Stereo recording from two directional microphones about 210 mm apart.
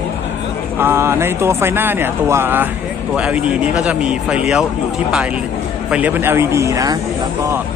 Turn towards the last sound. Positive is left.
turn(degrees=-15)  # may be behind; listen again after turning